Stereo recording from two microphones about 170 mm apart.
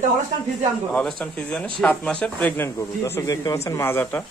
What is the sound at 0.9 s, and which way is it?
A man's voice, 5° left (ahead or behind).